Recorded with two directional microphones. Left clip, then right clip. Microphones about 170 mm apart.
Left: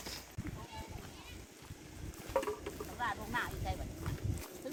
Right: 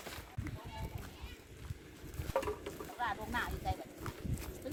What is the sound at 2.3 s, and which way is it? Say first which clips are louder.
Boat: left 1 dB; 50° right (ahead or behind).